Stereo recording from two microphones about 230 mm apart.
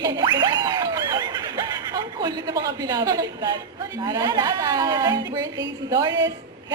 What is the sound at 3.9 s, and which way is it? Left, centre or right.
A woman's voice, centre.